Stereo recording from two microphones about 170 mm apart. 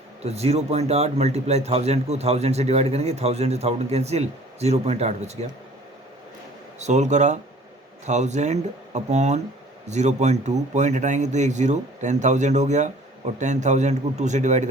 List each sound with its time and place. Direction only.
0.2 s a man's voice: 40° right (ahead or behind)
6.7 s a man's voice: 45° right (ahead or behind)